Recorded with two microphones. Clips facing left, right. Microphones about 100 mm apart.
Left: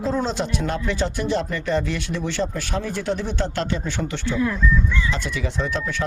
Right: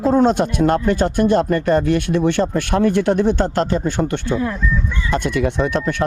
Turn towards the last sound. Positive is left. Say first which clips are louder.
# right 6 dB
turn(degrees=-60)  # may be behind; listen again after turning